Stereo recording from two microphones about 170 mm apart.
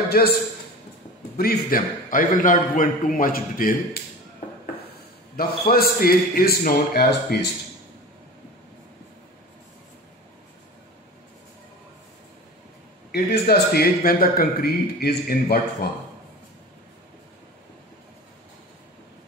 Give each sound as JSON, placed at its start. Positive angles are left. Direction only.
{"t": 0.2, "sound": "a man's voice", "side_deg": 65}
{"t": 1.4, "sound": "a man's voice", "side_deg": 55}
{"t": 5.3, "sound": "a man's voice", "side_deg": 60}
{"t": 13.1, "sound": "a man's voice", "side_deg": 65}